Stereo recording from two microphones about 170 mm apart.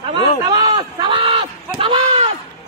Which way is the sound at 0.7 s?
30° right (ahead or behind).